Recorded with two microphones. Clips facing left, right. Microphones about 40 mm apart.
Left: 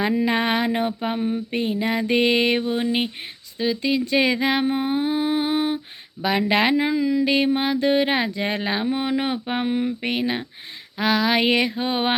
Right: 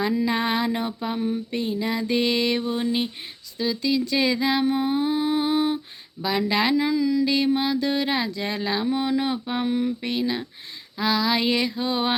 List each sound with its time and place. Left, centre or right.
0.0 s speech: left
1.5 s speech: left
4.7 s humming: left
6.5 s speech: left